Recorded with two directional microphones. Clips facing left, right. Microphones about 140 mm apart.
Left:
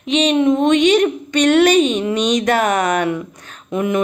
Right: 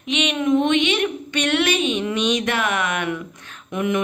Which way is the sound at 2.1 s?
40° left (ahead or behind).